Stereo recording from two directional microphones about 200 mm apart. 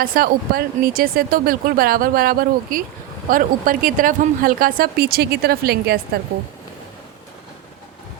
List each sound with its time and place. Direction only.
0.0 s speech: 45° right (ahead or behind)